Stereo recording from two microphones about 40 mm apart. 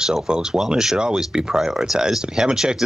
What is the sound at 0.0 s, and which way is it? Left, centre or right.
Speech, centre.